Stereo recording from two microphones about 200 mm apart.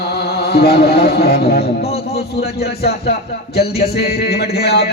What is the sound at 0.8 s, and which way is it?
A man's voice, 55° left (ahead or behind).